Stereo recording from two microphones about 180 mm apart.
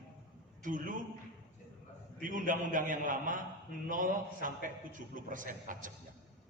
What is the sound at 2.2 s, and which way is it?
A man's voice, 45° right (ahead or behind).